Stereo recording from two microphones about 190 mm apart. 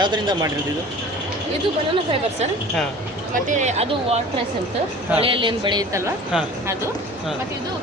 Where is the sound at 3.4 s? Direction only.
40° right (ahead or behind); by 6.1 s 20° right (ahead or behind).